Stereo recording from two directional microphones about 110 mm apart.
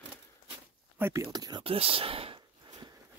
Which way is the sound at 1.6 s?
60° right (ahead or behind).